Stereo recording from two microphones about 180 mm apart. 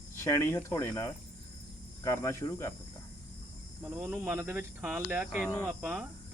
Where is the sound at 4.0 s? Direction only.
10° right (ahead or behind).